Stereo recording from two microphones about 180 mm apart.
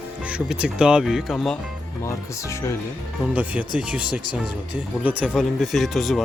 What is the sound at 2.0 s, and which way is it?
Speech, 15° left (ahead or behind).